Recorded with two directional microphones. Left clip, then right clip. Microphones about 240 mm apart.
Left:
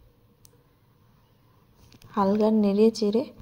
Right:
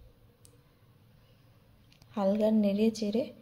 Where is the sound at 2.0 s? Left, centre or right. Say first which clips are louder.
Left 5 dB; centre.